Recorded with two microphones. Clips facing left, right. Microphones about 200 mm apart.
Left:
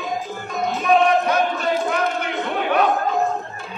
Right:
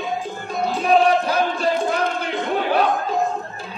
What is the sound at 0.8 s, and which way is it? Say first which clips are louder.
Music: even; 30° right (ahead or behind).